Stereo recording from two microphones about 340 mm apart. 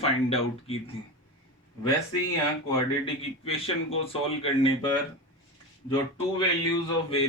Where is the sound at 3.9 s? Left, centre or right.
Centre.